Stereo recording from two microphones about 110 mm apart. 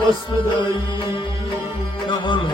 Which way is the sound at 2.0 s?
45° left (ahead or behind).